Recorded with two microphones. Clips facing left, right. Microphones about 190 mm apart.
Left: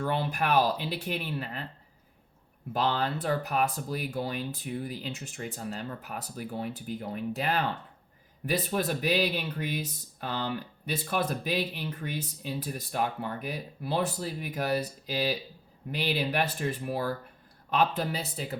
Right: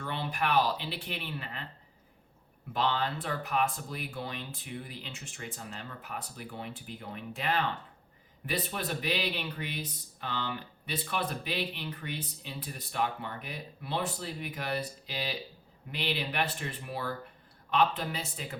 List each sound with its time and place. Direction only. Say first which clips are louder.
0.0 s speech: left 4 dB; 45° left (ahead or behind)
2.7 s speech: left 2 dB; 40° left (ahead or behind)